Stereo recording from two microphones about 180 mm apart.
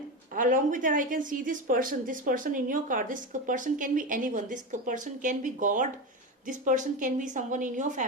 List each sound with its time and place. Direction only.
0.3 s a woman's voice: 45° right (ahead or behind)